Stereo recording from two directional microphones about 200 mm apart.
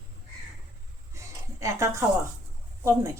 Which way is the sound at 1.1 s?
15° right (ahead or behind).